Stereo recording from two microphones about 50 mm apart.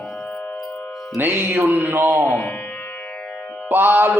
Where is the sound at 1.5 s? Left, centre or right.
Right.